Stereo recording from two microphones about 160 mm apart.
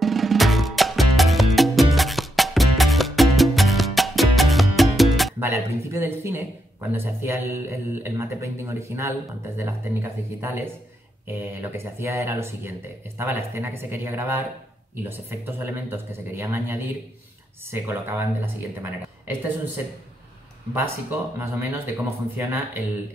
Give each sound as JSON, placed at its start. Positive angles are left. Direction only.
{"t": 0.0, "sound": "music", "side_deg": 0}
{"t": 5.4, "sound": "a man's voice", "side_deg": -15}
{"t": 20.7, "sound": "a man's voice", "side_deg": -15}